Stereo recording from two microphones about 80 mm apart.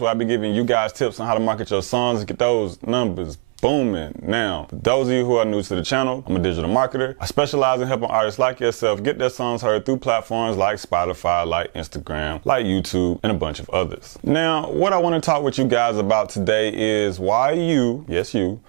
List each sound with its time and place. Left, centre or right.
0.0 s speech: centre